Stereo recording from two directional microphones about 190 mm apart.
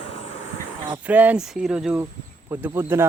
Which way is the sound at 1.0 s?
10° right (ahead or behind).